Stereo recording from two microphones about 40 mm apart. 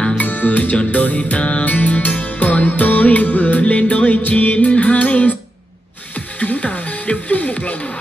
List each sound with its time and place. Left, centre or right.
0.2 s music: left
6.4 s music: left